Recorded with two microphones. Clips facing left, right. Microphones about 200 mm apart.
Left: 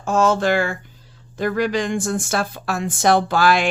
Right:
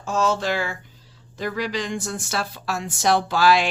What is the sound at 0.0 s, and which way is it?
Speech, 50° left (ahead or behind).